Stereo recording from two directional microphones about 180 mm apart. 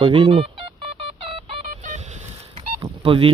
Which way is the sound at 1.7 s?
40° right (ahead or behind).